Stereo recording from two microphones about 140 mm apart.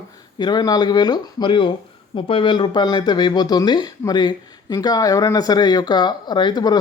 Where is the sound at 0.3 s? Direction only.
30° left (ahead or behind).